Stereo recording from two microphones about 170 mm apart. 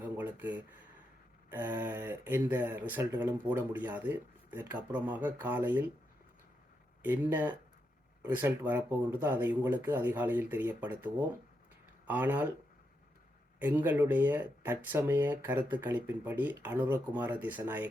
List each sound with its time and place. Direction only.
0.0 s a sound: 10° right (ahead or behind)
1.5 s speech: 10° right (ahead or behind)
7.0 s speech: 10° right (ahead or behind)
13.6 s speech: 10° right (ahead or behind)